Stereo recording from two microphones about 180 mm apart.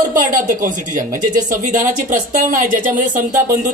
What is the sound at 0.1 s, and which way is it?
Speech, 45° right (ahead or behind).